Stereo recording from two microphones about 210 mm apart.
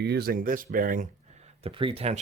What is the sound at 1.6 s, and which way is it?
Speech, 25° right (ahead or behind).